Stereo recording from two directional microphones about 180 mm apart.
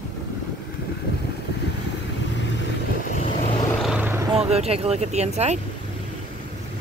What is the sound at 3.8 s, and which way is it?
Vehicle, 10° right (ahead or behind).